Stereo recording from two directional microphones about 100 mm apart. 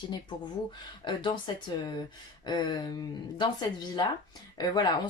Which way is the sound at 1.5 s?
45° left (ahead or behind).